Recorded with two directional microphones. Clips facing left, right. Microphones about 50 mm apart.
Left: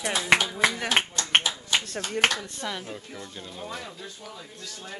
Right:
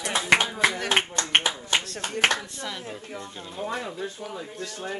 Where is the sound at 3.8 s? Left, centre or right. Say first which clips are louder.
Right 7 dB; right.